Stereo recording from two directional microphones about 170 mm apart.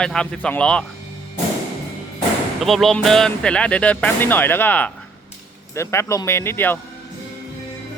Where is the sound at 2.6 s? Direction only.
Centre (ahead or behind).